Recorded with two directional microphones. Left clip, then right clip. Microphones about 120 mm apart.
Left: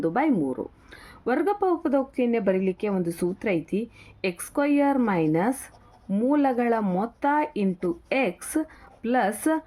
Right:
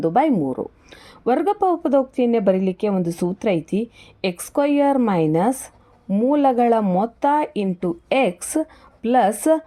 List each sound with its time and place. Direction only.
0.0 s speech: 45° right (ahead or behind)